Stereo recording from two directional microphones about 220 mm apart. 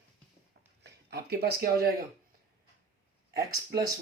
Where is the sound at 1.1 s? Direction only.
45° right (ahead or behind).